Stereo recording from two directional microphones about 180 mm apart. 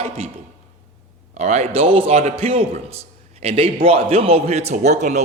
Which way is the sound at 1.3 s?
40° right (ahead or behind).